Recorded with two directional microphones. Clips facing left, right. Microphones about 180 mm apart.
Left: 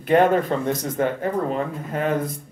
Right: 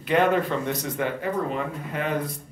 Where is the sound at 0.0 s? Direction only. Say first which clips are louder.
Left 4 dB; 45° left (ahead or behind).